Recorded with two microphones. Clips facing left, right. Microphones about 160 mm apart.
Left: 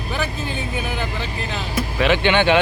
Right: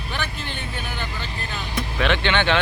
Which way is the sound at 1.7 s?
5° left (ahead or behind).